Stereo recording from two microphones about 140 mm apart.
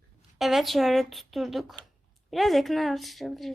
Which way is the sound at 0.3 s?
Centre (ahead or behind).